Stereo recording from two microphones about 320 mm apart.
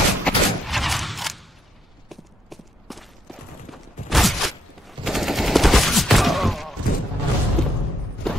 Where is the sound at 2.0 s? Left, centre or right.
Centre.